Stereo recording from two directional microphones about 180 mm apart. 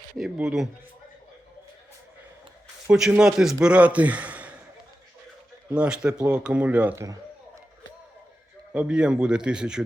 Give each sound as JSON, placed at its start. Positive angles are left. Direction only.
{"t": 0.2, "sound": "a man's voice", "side_deg": -5}
{"t": 2.9, "sound": "a man's voice", "side_deg": -5}
{"t": 5.7, "sound": "a man's voice", "side_deg": -5}
{"t": 8.7, "sound": "a man's voice", "side_deg": -5}